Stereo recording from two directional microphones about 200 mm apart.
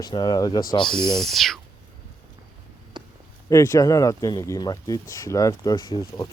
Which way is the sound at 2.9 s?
20° right (ahead or behind).